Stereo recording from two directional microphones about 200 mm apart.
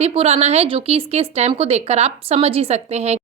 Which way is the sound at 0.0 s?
30° right (ahead or behind).